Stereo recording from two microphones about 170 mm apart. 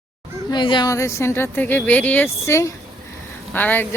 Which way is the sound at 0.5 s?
25° left (ahead or behind).